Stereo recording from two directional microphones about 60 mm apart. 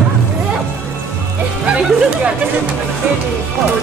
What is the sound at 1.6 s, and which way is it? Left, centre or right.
Music, centre.